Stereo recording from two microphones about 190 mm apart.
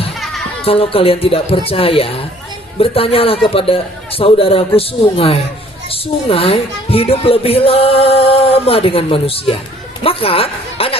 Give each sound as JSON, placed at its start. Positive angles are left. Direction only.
{"t": 0.6, "sound": "a man's voice", "side_deg": 30}